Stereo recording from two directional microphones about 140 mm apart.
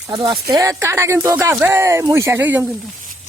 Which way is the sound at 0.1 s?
30° right (ahead or behind).